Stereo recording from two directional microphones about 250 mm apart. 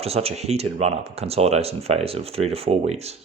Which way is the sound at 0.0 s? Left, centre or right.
Right.